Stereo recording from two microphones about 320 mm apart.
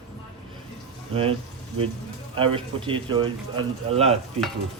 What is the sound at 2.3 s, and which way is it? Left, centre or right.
A man's voice, centre.